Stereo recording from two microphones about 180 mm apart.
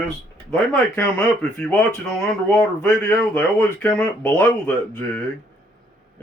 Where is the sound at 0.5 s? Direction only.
5° left (ahead or behind).